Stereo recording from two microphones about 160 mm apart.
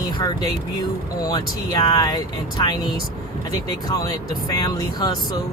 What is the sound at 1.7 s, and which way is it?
Speech, 25° left (ahead or behind).